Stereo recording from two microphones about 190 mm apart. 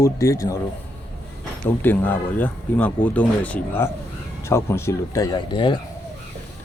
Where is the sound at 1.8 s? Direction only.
10° left (ahead or behind).